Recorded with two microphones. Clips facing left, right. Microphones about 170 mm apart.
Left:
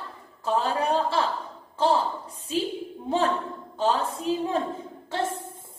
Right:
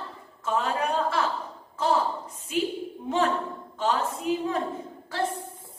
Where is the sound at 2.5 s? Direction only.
30° left (ahead or behind).